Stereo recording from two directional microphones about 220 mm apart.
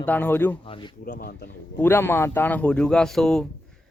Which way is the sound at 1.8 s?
10° left (ahead or behind).